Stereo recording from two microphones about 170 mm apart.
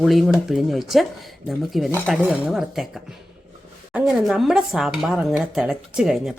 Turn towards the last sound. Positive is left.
turn(degrees=0)  # may be behind; listen again after turning